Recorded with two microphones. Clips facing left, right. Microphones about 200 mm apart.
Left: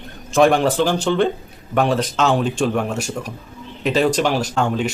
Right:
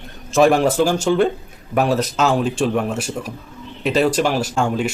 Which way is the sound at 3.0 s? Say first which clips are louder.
Even; 40° left (ahead or behind).